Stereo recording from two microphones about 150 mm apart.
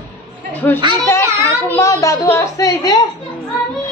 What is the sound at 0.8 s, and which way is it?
Speech, 30° right (ahead or behind).